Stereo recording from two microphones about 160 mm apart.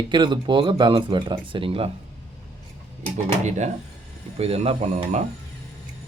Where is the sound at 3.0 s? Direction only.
45° right (ahead or behind).